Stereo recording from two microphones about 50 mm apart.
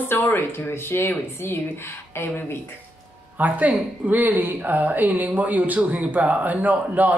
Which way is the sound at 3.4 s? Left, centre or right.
Right.